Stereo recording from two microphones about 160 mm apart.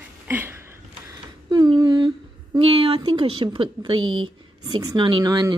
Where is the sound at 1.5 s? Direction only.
25° right (ahead or behind).